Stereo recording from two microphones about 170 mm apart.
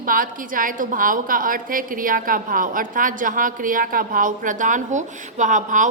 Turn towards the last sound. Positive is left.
turn(degrees=-45)  # may be behind; listen again after turning